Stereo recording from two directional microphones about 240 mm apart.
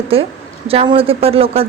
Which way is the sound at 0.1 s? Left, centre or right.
Right.